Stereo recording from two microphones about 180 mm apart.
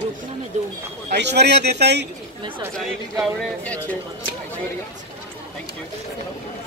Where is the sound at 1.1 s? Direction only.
70° right (ahead or behind).